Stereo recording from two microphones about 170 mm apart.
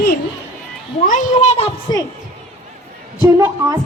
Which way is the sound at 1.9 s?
25° left (ahead or behind).